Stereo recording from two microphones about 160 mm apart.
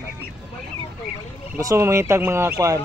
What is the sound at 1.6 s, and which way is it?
Speech, 20° right (ahead or behind).